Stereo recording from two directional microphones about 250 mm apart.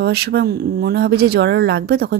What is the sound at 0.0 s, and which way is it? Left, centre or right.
Speech, right.